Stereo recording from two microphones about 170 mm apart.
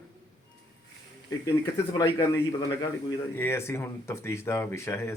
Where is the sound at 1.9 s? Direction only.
20° left (ahead or behind).